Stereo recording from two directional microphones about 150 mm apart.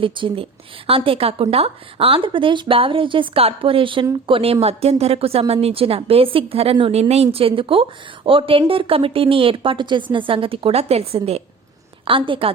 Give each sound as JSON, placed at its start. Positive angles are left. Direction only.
{"t": 0.0, "sound": "a woman's voice", "side_deg": -35}